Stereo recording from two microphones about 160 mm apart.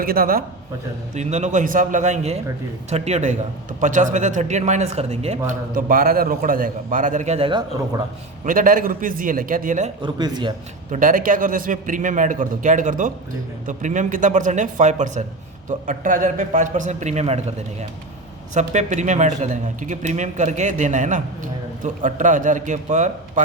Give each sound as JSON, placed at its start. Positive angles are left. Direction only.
{"t": 0.0, "sound": "a man's voice", "side_deg": -65}
{"t": 1.1, "sound": "speech", "side_deg": -45}
{"t": 5.5, "sound": "a man's voice", "side_deg": -65}
{"t": 8.4, "sound": "a man's voice", "side_deg": -55}
{"t": 10.0, "sound": "speech", "side_deg": -25}
{"t": 10.9, "sound": "speech", "side_deg": -55}